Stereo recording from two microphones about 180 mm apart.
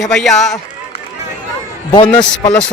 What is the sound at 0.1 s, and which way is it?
Speech, centre (ahead or behind).